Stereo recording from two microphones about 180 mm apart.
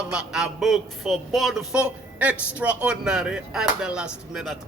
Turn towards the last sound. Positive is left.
turn(degrees=0)  # may be behind; listen again after turning